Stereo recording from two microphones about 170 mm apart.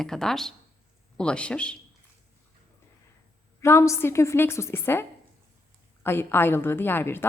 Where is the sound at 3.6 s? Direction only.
15° left (ahead or behind).